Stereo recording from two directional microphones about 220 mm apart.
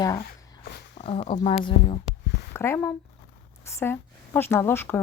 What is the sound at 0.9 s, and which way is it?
Speech, 25° left (ahead or behind).